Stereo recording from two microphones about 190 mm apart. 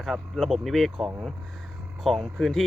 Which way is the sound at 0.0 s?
Centre (ahead or behind).